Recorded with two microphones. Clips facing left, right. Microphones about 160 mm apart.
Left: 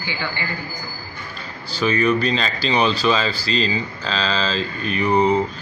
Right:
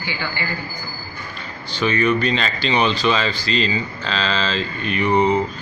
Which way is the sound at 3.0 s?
5° right (ahead or behind).